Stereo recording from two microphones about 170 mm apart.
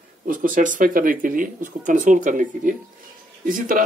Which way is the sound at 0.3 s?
50° right (ahead or behind).